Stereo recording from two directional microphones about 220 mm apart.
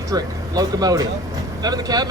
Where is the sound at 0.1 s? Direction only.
15° right (ahead or behind).